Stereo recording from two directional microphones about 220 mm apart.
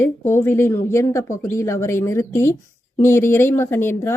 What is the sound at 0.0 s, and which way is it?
Speech, 10° left (ahead or behind).